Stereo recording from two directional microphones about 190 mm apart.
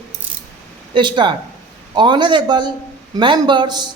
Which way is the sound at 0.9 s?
25° right (ahead or behind).